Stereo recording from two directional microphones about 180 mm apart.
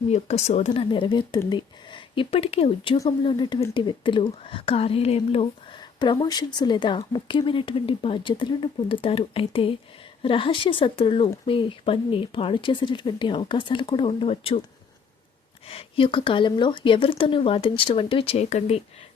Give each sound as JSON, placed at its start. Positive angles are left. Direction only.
{"t": 0.1, "sound": "speech", "side_deg": 40}
{"t": 0.7, "sound": "speech", "side_deg": 25}
{"t": 15.6, "sound": "speech", "side_deg": 30}